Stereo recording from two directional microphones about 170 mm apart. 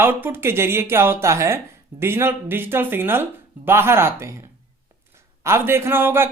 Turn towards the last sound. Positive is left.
turn(degrees=-10)  # may be behind; listen again after turning